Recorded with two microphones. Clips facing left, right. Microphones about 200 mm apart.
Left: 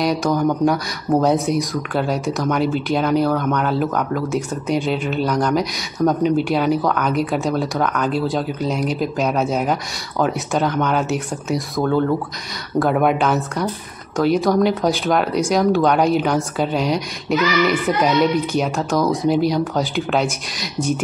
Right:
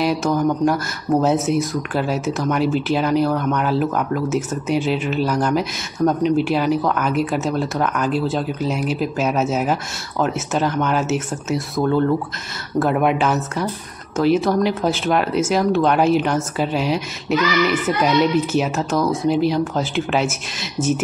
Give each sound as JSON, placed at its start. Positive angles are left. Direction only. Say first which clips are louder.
{"t": 0.0, "sound": "speech", "louder": "even", "side_deg": 0}